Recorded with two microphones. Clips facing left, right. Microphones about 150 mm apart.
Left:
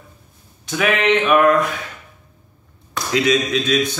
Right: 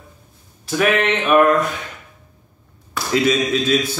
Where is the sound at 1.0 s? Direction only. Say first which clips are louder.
Left 2 dB; centre (ahead or behind).